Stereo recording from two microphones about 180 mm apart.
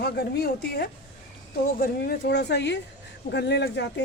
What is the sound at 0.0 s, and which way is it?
A woman's voice, 65° left (ahead or behind).